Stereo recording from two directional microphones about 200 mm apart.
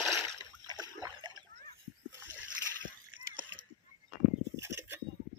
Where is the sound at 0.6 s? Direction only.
20° right (ahead or behind).